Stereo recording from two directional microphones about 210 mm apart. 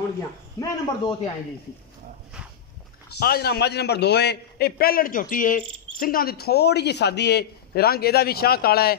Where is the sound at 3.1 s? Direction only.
50° left (ahead or behind).